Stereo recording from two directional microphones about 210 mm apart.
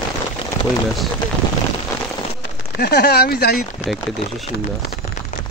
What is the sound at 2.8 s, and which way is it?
Speech, 50° left (ahead or behind).